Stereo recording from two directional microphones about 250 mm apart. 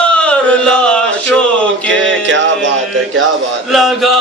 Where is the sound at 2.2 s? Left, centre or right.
Right.